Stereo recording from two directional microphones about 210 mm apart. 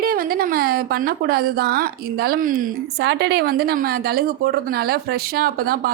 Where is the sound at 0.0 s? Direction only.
45° right (ahead or behind).